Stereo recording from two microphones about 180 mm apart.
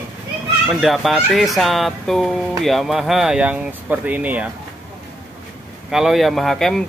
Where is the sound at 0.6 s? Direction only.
Centre (ahead or behind).